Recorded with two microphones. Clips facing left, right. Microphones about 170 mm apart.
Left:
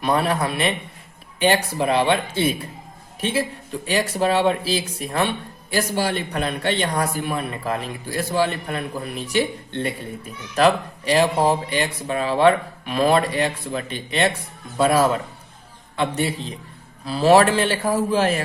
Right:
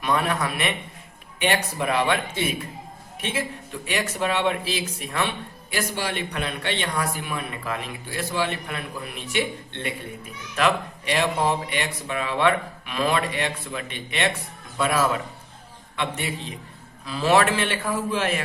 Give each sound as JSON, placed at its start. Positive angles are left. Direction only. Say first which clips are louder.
{"t": 0.0, "sound": "a man's voice", "louder": "left 3 dB", "side_deg": 35}